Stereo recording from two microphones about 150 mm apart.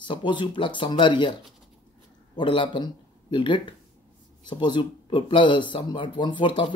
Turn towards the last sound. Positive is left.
turn(degrees=30)  # may be behind; listen again after turning